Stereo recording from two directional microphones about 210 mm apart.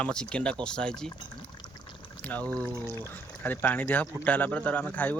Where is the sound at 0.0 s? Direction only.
5° left (ahead or behind).